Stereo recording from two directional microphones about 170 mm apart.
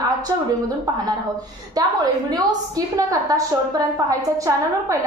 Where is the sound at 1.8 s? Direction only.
20° right (ahead or behind).